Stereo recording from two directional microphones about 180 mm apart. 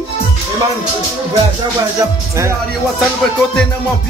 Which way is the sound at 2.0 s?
15° right (ahead or behind).